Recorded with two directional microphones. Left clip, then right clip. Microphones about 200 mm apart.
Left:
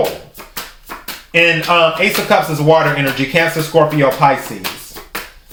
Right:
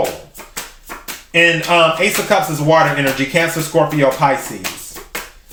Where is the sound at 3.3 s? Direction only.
20° left (ahead or behind).